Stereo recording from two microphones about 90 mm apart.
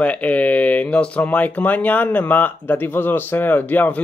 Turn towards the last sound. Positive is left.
turn(degrees=20)  # may be behind; listen again after turning